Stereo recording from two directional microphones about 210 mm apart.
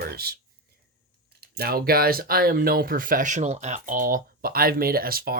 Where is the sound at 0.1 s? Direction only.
45° right (ahead or behind).